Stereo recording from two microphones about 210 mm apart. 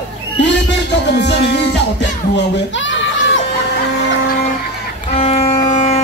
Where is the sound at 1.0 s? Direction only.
55° left (ahead or behind).